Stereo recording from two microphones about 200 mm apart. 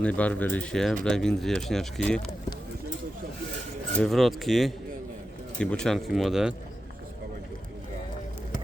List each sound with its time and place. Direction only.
0.0 s speech: 5° left (ahead or behind)
3.9 s speech: centre (ahead or behind)